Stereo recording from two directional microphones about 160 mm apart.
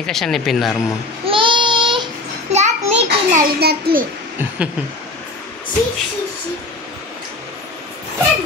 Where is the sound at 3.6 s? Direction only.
80° right.